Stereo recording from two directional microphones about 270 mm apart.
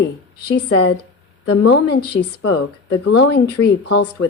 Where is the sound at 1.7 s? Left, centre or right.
Left.